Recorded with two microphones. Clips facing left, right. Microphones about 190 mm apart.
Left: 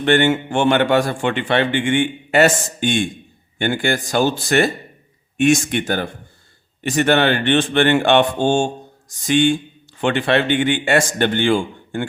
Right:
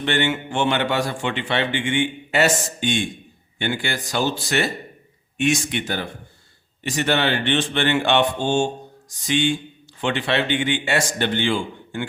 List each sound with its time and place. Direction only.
0.0 s speech: 50° left (ahead or behind)